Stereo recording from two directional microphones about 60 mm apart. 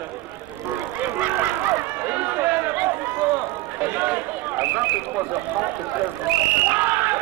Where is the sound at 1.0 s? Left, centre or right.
Right.